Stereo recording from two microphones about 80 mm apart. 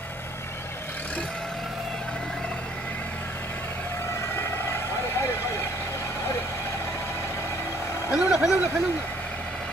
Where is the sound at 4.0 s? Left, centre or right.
Left.